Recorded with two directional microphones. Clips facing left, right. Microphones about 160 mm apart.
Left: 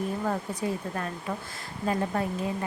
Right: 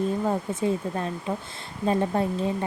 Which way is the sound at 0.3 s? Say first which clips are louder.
Right 4 dB; 25° right (ahead or behind).